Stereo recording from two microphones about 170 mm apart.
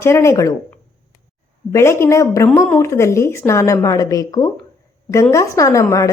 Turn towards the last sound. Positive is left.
turn(degrees=15)  # may be behind; listen again after turning